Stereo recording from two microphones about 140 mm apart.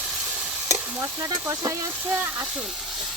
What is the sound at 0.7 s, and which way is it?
Stir, 20° right (ahead or behind).